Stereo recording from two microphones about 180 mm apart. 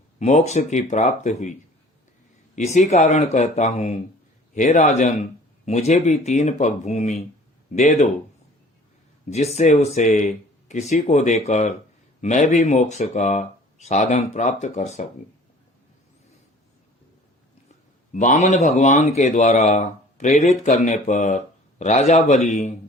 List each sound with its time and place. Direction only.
0.2 s speech: 40° left (ahead or behind)
2.6 s a man's voice: 40° left (ahead or behind)
9.3 s speech: 35° left (ahead or behind)
18.1 s a man's voice: 45° left (ahead or behind)